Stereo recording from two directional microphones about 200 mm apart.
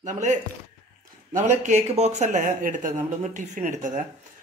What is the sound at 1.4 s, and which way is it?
Speech, 35° right (ahead or behind).